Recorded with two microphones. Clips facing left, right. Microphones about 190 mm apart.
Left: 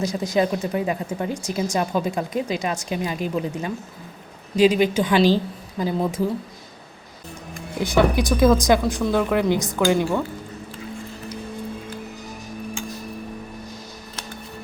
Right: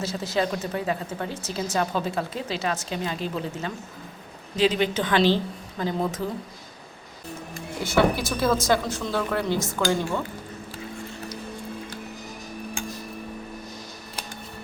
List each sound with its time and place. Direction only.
0.0 s speech: 15° left (ahead or behind)
7.8 s speech: 15° left (ahead or behind)